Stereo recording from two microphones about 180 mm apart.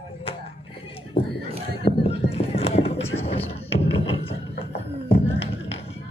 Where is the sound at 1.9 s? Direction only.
35° left (ahead or behind).